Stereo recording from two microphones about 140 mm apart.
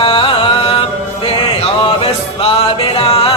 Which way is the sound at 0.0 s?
40° left (ahead or behind).